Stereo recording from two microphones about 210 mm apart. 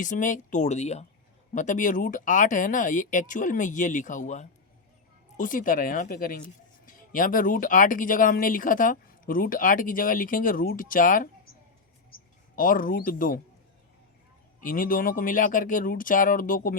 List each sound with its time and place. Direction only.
0.0 s speech: 35° left (ahead or behind)
12.5 s speech: 40° left (ahead or behind)
14.6 s speech: 40° left (ahead or behind)